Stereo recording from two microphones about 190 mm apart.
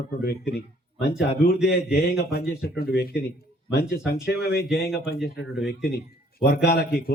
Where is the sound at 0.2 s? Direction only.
55° left (ahead or behind).